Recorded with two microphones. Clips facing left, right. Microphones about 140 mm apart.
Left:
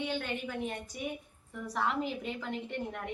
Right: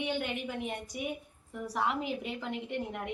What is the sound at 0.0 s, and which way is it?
A woman's voice, 15° right (ahead or behind).